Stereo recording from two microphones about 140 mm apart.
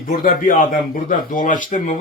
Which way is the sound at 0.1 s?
75° left (ahead or behind).